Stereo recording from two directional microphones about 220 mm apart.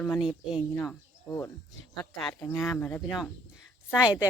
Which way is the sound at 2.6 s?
5° left (ahead or behind).